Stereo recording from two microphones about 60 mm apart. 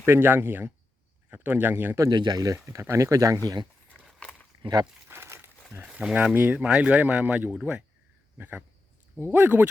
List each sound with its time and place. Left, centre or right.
0.0 s speech: right
2.0 s speech: right
2.6 s speech: right
5.0 s crumpling: right
5.8 s a sound: centre
6.3 s speech: right
6.7 s speech: right